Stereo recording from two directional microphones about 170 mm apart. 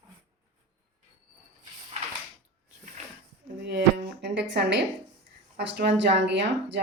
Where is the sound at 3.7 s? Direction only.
85° right.